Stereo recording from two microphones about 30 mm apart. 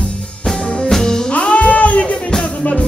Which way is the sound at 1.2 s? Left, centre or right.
Left.